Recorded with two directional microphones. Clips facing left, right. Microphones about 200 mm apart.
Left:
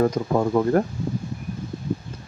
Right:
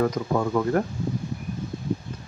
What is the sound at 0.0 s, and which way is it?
Speech, 30° left (ahead or behind).